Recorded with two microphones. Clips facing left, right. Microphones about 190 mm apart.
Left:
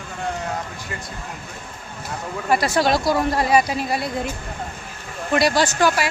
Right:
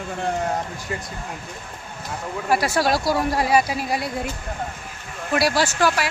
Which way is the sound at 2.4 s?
10° right (ahead or behind).